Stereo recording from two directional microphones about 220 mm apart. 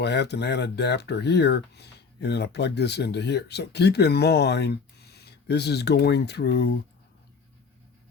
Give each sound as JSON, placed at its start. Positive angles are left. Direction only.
{"t": 0.0, "sound": "speech", "side_deg": 50}